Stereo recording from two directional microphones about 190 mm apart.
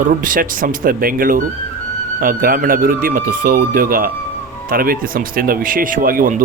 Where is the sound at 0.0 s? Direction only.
45° right (ahead or behind).